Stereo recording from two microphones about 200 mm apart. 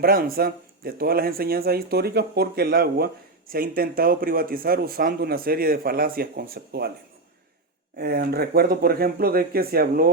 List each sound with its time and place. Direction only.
0.0 s speech: 45° right (ahead or behind)
7.9 s speech: 50° right (ahead or behind)